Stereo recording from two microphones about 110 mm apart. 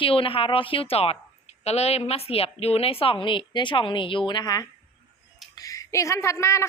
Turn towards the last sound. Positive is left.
turn(degrees=25)  # may be behind; listen again after turning